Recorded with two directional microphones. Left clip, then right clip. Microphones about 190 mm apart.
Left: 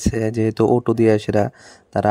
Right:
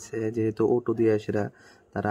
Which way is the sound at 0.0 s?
35° left (ahead or behind).